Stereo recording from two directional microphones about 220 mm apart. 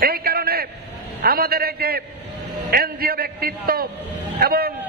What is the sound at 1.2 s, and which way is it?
A man's voice, 45° right (ahead or behind).